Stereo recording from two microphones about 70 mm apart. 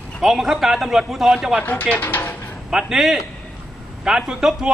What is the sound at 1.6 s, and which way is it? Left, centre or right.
Speech, left.